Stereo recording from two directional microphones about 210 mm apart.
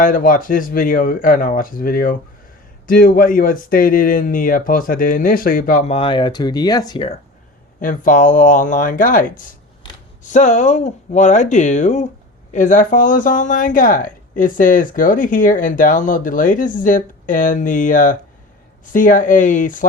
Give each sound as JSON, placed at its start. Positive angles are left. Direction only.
{"t": 0.0, "sound": "speech", "side_deg": 40}
{"t": 7.8, "sound": "speech", "side_deg": 40}